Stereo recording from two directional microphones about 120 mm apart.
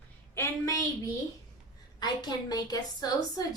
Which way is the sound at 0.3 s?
25° left (ahead or behind).